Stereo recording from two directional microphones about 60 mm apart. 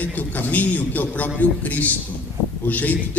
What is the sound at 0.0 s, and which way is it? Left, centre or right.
A man's voice, left.